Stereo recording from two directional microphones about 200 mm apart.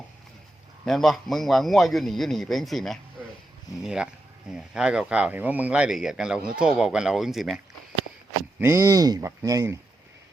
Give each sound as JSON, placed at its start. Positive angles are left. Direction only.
{"t": 0.9, "sound": "speech", "side_deg": 0}
{"t": 8.5, "sound": "speech", "side_deg": -15}